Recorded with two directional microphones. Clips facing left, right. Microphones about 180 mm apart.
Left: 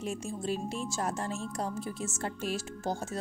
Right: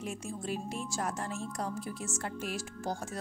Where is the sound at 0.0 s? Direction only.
25° left (ahead or behind).